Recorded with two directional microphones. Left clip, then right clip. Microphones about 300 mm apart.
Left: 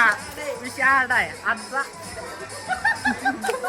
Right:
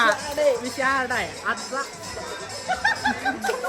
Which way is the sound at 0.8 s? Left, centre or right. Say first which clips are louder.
Left 8 dB; centre.